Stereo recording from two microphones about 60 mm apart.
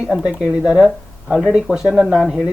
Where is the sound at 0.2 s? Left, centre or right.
Centre.